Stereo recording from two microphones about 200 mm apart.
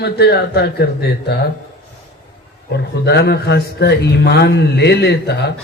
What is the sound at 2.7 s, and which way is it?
A man's voice, 55° left (ahead or behind).